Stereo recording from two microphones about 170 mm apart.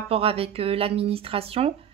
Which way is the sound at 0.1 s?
35° right (ahead or behind).